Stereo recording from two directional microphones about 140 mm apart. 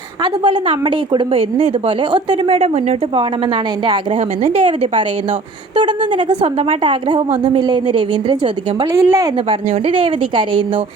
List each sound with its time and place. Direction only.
0.4 s a woman's voice: 35° right (ahead or behind)
4.4 s a woman's voice: 45° right (ahead or behind)
8.9 s speech: 20° right (ahead or behind)
9.5 s a woman's voice: 40° right (ahead or behind)